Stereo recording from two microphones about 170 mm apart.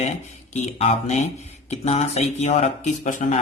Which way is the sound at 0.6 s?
40° left (ahead or behind).